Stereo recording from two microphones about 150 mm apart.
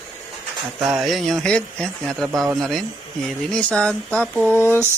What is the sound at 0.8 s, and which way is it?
Speech, centre (ahead or behind).